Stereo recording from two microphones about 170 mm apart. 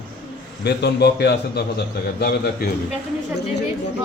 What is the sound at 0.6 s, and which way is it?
A man's voice, 75° left (ahead or behind).